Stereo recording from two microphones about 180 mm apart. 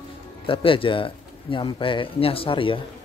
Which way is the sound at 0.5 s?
30° left (ahead or behind).